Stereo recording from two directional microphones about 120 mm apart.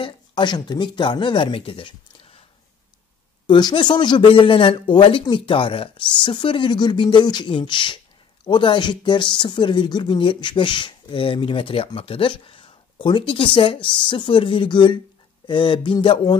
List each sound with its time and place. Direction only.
0.0 s speech: 40° left (ahead or behind)
3.4 s speech: 40° left (ahead or behind)